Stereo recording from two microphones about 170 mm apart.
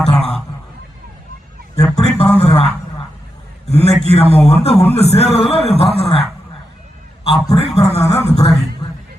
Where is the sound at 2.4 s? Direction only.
35° left (ahead or behind).